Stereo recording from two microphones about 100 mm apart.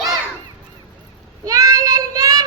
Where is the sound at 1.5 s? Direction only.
40° right (ahead or behind).